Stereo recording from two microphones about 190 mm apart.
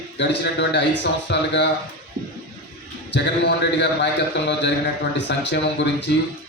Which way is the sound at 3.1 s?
65° left (ahead or behind).